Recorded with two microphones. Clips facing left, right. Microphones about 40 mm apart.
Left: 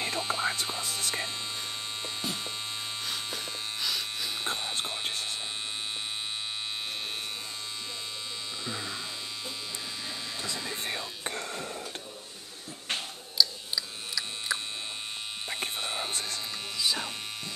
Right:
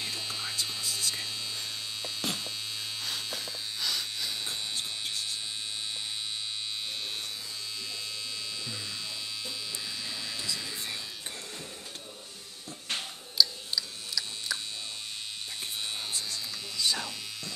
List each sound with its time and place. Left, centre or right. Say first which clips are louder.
0.2 s whispering: left 5 dB; left
2.2 s hum: right 2 dB; right
3.8 s electric shaver: even; centre
4.5 s a sound: left 3 dB; left
10.7 s music: left 3 dB; left
12.9 s a sound: even; centre
15.8 s whispering: left 3 dB; left
16.1 s electric shaver: left 2 dB; left
16.7 s buzz: even; centre